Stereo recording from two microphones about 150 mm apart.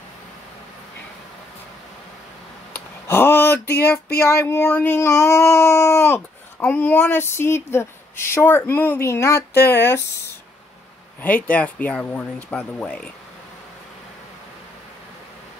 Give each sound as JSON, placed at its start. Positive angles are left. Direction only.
{"t": 2.7, "sound": "a sound", "side_deg": 15}
{"t": 4.2, "sound": "speech", "side_deg": 15}
{"t": 11.2, "sound": "speech", "side_deg": 10}